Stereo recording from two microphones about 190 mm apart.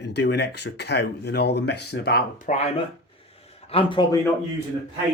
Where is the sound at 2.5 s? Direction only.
40° left (ahead or behind).